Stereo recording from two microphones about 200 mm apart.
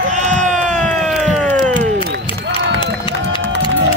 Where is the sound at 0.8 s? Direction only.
5° left (ahead or behind).